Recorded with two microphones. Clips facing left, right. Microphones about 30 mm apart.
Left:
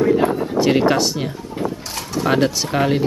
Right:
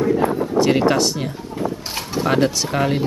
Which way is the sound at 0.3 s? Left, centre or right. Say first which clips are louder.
Right 1 dB; centre.